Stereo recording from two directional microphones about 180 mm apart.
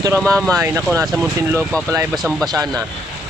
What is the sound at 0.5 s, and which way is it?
Speech, 15° right (ahead or behind).